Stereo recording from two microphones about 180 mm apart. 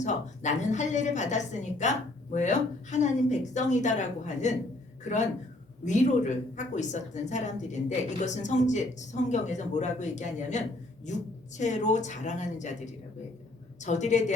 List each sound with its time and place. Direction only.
0.0 s speech: 40° left (ahead or behind)
5.8 s speech: 40° left (ahead or behind)